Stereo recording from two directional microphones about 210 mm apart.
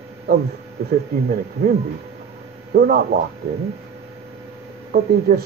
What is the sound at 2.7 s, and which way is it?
Speech, 45° right (ahead or behind).